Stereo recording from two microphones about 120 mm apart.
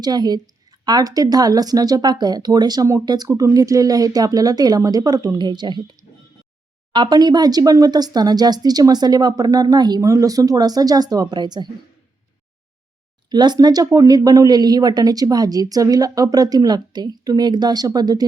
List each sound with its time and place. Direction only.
0.0 s a woman's voice: 35° right (ahead or behind)
13.3 s a woman's voice: 35° right (ahead or behind)